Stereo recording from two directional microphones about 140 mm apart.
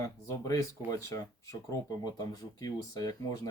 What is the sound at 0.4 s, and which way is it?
Speech, 25° left (ahead or behind).